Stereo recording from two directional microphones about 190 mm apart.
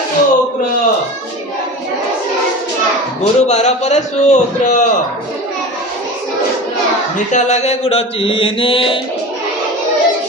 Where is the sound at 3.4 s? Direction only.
35° left (ahead or behind).